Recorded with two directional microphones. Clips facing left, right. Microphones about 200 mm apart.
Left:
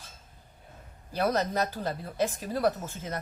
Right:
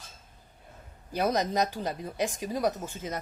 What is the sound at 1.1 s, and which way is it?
Speech, 15° right (ahead or behind).